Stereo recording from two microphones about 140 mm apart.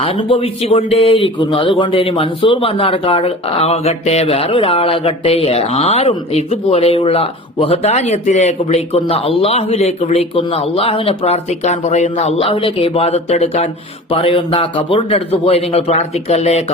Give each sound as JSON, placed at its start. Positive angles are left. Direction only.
{"t": 0.0, "sound": "speech", "side_deg": 40}